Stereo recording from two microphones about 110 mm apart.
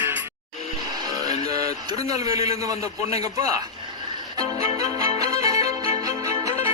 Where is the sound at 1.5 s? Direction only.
35° right (ahead or behind).